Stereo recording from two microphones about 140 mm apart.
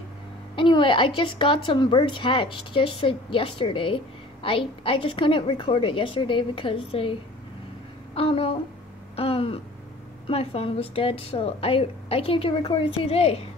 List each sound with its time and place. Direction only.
0.6 s a woman's voice: 35° left (ahead or behind)
9.1 s a sound: 45° left (ahead or behind)
10.2 s a woman's voice: 45° left (ahead or behind)